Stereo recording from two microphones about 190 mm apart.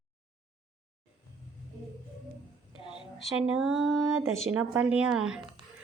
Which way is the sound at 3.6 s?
Centre (ahead or behind).